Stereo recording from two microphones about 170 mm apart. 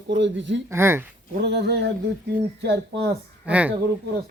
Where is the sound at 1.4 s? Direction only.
80° right.